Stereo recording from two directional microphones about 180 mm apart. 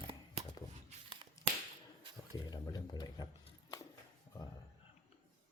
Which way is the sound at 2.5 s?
20° left (ahead or behind).